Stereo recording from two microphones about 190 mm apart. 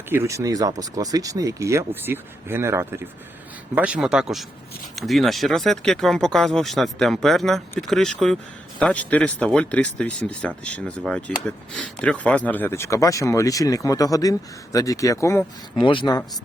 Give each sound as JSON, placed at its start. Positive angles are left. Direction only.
{"t": 0.1, "sound": "speech", "side_deg": -15}
{"t": 15.8, "sound": "speech", "side_deg": 25}